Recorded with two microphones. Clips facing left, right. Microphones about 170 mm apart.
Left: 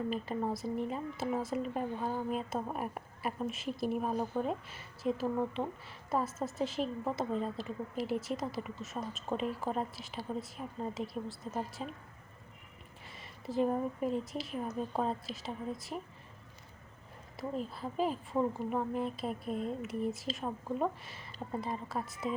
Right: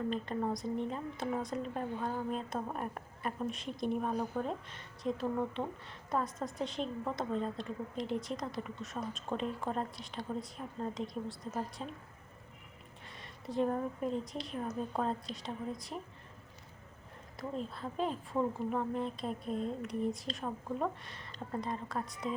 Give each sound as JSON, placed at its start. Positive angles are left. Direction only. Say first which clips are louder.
{"t": 0.1, "sound": "speech", "louder": "even", "side_deg": 5}
{"t": 13.1, "sound": "speech", "louder": "left 2 dB", "side_deg": 5}
{"t": 17.3, "sound": "speech", "louder": "left 2 dB", "side_deg": 5}